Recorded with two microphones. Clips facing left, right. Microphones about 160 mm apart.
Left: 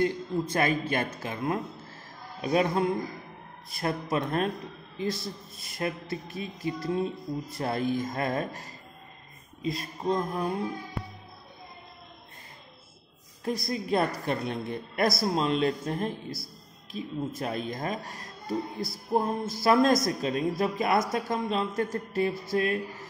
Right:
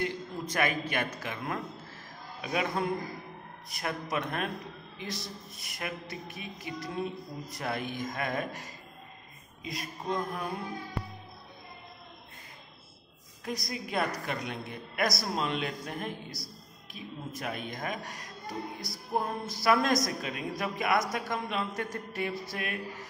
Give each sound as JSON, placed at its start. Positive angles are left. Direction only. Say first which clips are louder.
{"t": 0.0, "sound": "a woman's voice", "louder": "left 7 dB", "side_deg": 30}
{"t": 3.8, "sound": "a woman's voice", "louder": "left 5 dB", "side_deg": 35}
{"t": 13.4, "sound": "a woman's voice", "louder": "left 6 dB", "side_deg": 30}